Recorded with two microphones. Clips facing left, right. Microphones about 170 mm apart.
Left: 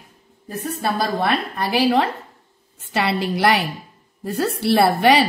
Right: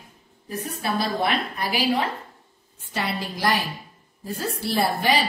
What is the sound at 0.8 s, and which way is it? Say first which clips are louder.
A woman's voice: left 3 dB; 70° left (ahead or behind).